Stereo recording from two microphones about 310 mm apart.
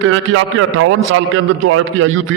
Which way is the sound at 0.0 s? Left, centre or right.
Right.